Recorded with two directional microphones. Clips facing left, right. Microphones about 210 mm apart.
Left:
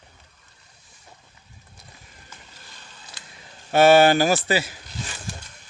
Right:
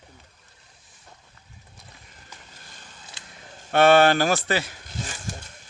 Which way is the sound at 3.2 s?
25° right (ahead or behind).